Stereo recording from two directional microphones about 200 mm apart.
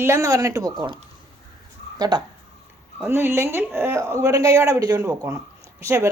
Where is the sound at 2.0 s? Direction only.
20° right (ahead or behind).